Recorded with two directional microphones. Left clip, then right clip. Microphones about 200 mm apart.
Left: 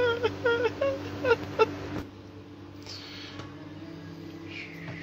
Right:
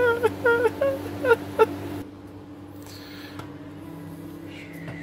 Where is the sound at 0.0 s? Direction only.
15° right (ahead or behind).